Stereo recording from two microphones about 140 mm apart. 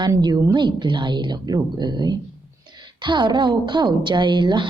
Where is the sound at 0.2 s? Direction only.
30° right (ahead or behind).